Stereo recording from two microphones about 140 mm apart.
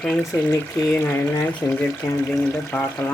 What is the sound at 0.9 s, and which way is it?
Speech, 15° left (ahead or behind).